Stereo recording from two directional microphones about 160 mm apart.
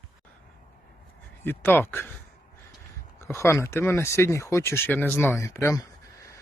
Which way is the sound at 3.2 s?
15° left (ahead or behind).